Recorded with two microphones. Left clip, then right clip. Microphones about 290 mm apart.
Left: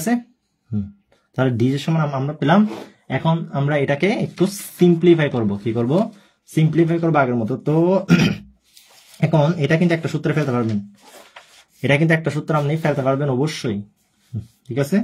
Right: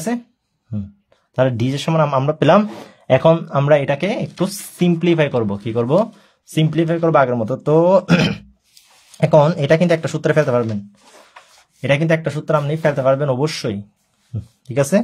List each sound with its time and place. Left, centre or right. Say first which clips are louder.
1.3 s speech: right 2 dB; centre
3.1 s speech: right 10 dB; right
11.8 s speech: right 1 dB; centre